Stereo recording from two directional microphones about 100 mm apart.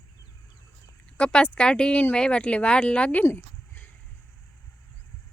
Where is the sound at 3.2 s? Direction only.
20° left (ahead or behind).